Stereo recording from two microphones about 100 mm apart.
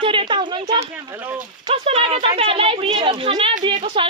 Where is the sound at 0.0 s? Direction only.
60° right (ahead or behind).